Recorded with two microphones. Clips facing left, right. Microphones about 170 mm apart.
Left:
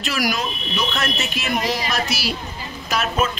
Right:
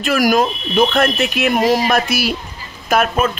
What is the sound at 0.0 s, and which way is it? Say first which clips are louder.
Speech: right 9 dB; 50° right (ahead or behind).